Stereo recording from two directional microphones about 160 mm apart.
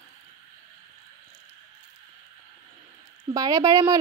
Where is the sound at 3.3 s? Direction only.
25° right (ahead or behind).